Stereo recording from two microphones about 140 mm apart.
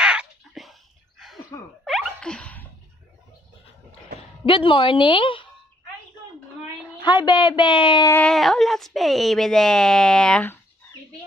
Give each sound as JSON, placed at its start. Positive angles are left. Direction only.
{"t": 0.0, "sound": "a sound", "side_deg": -5}
{"t": 1.5, "sound": "a sound", "side_deg": 25}
{"t": 1.9, "sound": "sneeze", "side_deg": 0}
{"t": 4.2, "sound": "speech", "side_deg": 40}
{"t": 7.0, "sound": "a woman's voice", "side_deg": 30}
{"t": 8.3, "sound": "speech", "side_deg": 0}